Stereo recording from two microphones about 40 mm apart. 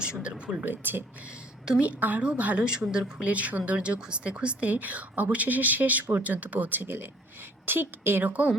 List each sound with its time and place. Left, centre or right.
0.0 s speech: right
0.6 s a woman's voice: right
1.8 s a woman's voice: right
2.6 s speech: right
3.2 s a woman's voice: right
4.7 s speech: right
7.6 s a woman's voice: right
8.2 s a woman's voice: right